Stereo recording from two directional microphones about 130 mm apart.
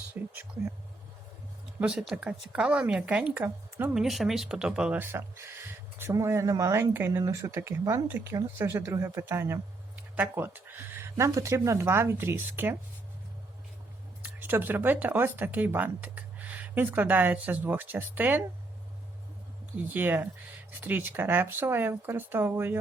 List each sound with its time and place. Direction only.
0.1 s speech: 15° right (ahead or behind)
1.8 s speech: 5° right (ahead or behind)
3.9 s speech: centre (ahead or behind)
14.2 s speech: 15° right (ahead or behind)
19.9 s speech: 15° right (ahead or behind)